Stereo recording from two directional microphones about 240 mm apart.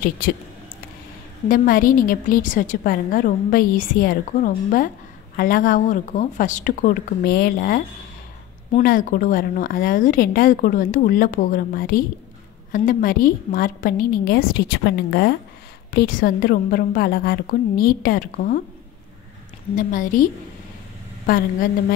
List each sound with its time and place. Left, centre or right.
1.5 s a woman's voice: left
19.7 s a woman's voice: left